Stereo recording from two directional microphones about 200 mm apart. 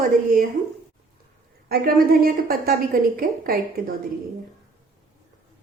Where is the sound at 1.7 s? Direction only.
50° right (ahead or behind).